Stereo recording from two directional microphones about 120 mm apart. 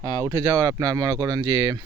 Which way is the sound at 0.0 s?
25° right (ahead or behind).